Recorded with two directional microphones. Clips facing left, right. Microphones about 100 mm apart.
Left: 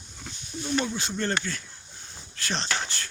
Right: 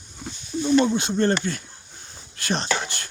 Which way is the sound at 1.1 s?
45° right (ahead or behind).